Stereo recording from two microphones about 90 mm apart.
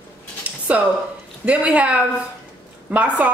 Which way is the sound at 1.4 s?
15° right (ahead or behind).